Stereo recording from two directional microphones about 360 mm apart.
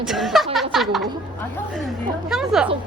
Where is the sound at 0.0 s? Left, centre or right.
Centre.